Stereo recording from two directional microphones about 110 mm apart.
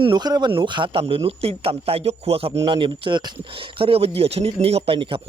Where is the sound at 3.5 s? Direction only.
55° right (ahead or behind).